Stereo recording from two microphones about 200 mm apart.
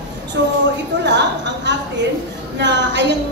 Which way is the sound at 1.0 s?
60° right (ahead or behind).